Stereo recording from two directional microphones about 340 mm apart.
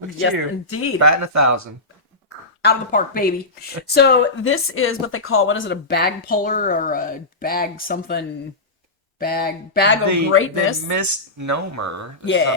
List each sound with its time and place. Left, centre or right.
0.2 s speech: left
0.9 s speech: right
2.6 s speech: left
10.8 s speech: right